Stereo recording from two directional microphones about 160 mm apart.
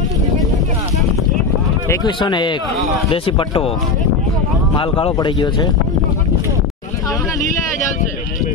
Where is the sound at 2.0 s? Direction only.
30° left (ahead or behind).